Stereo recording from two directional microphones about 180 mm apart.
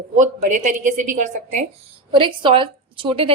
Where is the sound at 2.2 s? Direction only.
30° right (ahead or behind).